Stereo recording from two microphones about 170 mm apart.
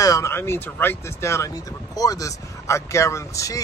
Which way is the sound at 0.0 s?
20° left (ahead or behind).